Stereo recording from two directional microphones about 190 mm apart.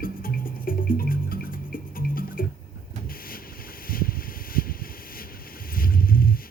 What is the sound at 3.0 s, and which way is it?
Boat, 50° left (ahead or behind).